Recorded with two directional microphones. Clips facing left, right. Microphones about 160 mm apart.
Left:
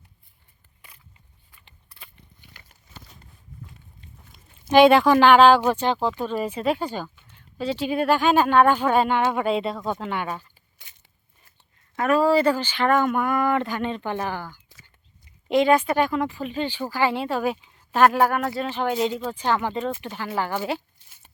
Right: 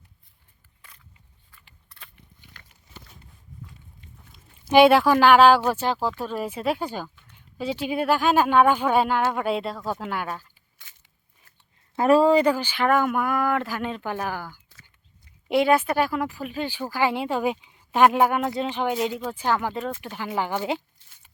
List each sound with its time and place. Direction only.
0.8 s a sound: 10° left (ahead or behind)
4.7 s speech: 5° right (ahead or behind)
11.9 s speech: 30° right (ahead or behind)
12.3 s speech: 15° right (ahead or behind)
18.9 s speech: 5° right (ahead or behind)
21.0 s a sound: 15° left (ahead or behind)